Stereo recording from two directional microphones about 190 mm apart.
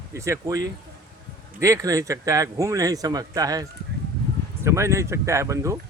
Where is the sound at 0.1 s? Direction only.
15° right (ahead or behind).